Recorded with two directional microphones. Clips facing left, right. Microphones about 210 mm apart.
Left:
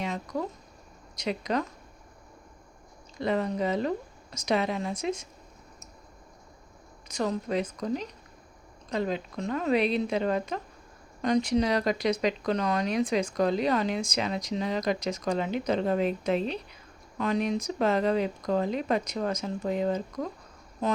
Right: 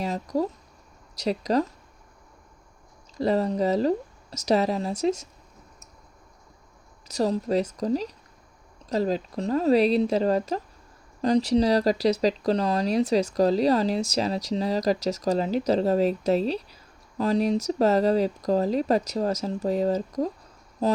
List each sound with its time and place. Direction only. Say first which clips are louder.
0.0 s speech: right 5 dB; 35° right (ahead or behind)
3.2 s speech: right 4 dB; 35° right (ahead or behind)
7.1 s speech: right 5 dB; 35° right (ahead or behind)